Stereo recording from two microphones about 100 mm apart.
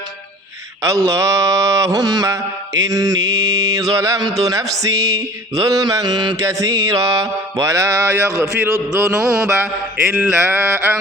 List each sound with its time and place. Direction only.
0.8 s mantra: 35° right (ahead or behind)
8.5 s mantra: 20° right (ahead or behind)